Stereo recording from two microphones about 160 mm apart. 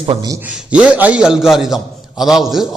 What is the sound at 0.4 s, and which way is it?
A man's voice, 10° right (ahead or behind).